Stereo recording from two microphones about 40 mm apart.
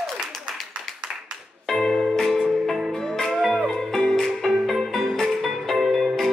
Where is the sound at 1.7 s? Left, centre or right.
Centre.